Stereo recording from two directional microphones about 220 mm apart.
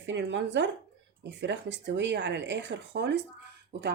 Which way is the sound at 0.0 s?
55° right (ahead or behind).